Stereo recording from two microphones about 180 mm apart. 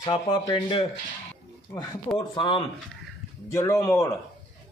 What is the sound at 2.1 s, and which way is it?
Speech, 25° left (ahead or behind).